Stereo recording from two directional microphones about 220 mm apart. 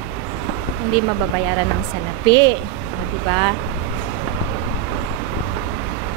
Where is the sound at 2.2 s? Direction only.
20° right (ahead or behind).